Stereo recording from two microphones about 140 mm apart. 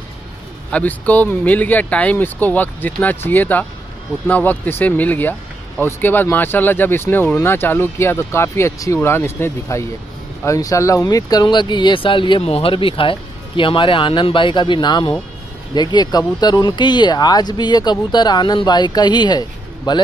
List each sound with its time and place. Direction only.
0.7 s speech: 10° left (ahead or behind); by 20.0 s 30° left (ahead or behind)